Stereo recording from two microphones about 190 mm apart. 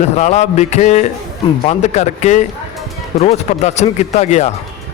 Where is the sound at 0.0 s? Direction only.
40° left (ahead or behind).